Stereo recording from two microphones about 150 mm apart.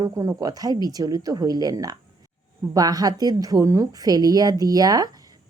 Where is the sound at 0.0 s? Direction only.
20° right (ahead or behind).